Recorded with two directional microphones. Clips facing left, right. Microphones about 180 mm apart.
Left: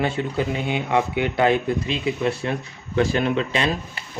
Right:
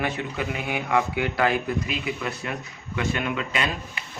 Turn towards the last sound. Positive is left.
turn(degrees=30)  # may be behind; listen again after turning